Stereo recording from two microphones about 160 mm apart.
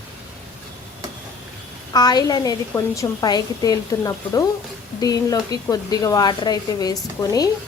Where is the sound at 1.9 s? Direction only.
25° left (ahead or behind).